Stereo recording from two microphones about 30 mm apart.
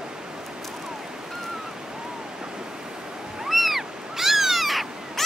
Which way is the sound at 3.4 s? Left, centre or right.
Centre.